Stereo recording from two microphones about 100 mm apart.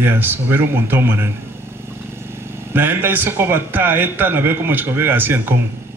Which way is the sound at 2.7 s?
20° right (ahead or behind).